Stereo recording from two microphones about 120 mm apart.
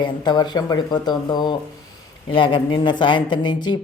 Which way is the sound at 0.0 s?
35° left (ahead or behind).